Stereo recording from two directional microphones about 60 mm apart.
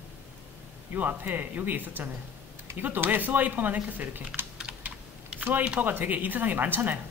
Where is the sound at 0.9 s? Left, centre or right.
Right.